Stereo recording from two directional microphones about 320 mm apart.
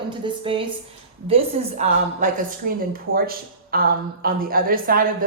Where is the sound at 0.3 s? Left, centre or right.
Centre.